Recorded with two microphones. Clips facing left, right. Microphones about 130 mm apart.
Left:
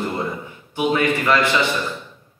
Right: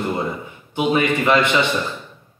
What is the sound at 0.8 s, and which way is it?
Speech, 20° right (ahead or behind).